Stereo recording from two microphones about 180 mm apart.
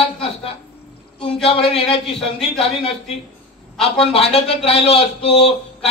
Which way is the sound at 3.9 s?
35° left (ahead or behind).